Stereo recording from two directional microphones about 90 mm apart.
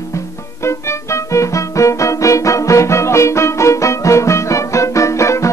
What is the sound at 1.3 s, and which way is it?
Music, 35° left (ahead or behind).